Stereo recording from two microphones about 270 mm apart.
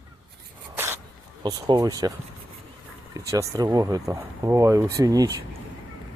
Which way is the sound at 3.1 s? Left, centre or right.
Centre.